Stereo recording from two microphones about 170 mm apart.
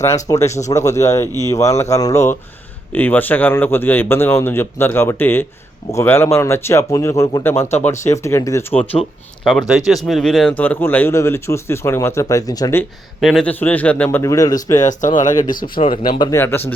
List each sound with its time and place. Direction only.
0.0 s a man's voice: 20° left (ahead or behind)
8.8 s a man's voice: 5° left (ahead or behind)
13.1 s a man's voice: centre (ahead or behind)
14.2 s speech: 20° left (ahead or behind)
15.5 s speech: 60° left (ahead or behind)
15.8 s speech: 30° left (ahead or behind)
16.3 s a man's voice: 15° left (ahead or behind)